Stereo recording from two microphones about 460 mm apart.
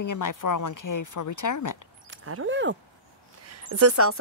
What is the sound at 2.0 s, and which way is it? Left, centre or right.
Speech, right.